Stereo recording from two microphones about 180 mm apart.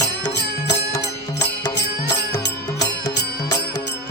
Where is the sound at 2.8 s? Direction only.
20° left (ahead or behind).